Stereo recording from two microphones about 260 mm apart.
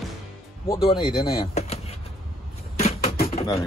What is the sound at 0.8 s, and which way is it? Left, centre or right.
Speech, centre.